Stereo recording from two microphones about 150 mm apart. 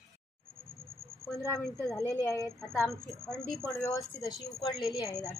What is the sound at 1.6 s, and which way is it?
Speech, 20° left (ahead or behind).